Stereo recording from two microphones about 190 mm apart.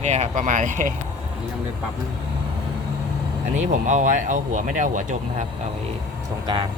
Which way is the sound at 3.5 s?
40° right (ahead or behind).